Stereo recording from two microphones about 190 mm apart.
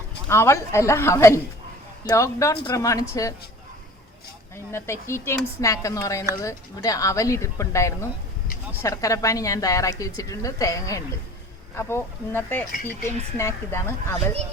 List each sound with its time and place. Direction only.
0.3 s a woman's voice: 15° left (ahead or behind)
4.5 s a woman's voice: 15° left (ahead or behind)